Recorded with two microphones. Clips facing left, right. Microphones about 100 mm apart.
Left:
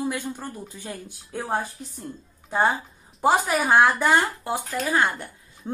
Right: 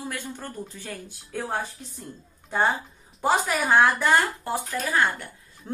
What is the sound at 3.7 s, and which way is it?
Speech, 15° left (ahead or behind).